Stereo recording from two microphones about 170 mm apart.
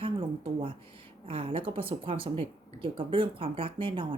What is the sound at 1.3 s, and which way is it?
Speech, 35° right (ahead or behind).